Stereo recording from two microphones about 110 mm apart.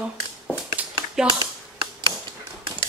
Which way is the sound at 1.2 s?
5° right (ahead or behind).